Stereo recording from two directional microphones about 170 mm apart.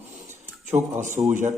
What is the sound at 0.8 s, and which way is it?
Speech, 15° right (ahead or behind).